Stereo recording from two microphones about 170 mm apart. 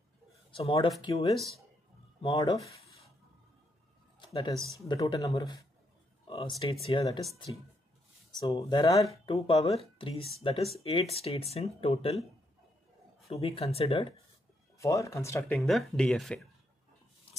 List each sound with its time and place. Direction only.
0.5 s speech: 35° left (ahead or behind)
2.3 s speech: 20° left (ahead or behind)
4.2 s speech: 25° left (ahead or behind)
6.2 s a sound: 25° left (ahead or behind)
6.6 s speech: 30° left (ahead or behind)
8.3 s speech: 20° left (ahead or behind)
9.2 s speech: 35° left (ahead or behind)
13.3 s speech: 35° left (ahead or behind)
14.8 s speech: 20° left (ahead or behind)
15.6 s speech: centre (ahead or behind)